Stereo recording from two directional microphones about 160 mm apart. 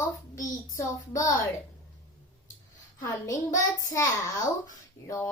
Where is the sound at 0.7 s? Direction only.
20° left (ahead or behind).